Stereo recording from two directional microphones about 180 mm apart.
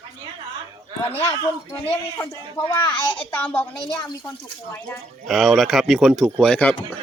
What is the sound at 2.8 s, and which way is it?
Speech, 10° left (ahead or behind).